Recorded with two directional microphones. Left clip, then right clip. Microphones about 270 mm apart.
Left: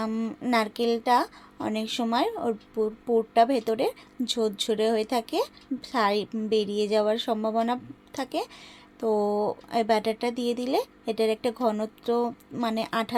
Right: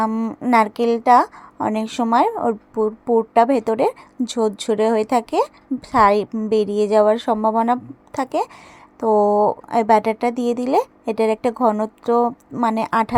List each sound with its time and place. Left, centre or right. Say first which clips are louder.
0.0 s a woman's voice: right 9 dB; centre